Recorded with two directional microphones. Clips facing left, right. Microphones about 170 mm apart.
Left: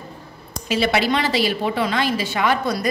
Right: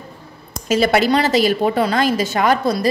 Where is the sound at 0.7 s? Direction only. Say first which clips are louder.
Right 4 dB; 45° right (ahead or behind).